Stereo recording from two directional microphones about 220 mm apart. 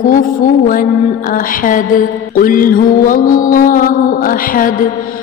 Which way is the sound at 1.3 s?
40° left (ahead or behind).